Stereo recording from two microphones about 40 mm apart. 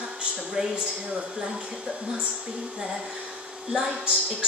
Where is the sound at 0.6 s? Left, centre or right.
Centre.